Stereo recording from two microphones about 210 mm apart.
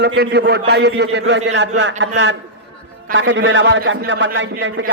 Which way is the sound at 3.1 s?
65° right (ahead or behind).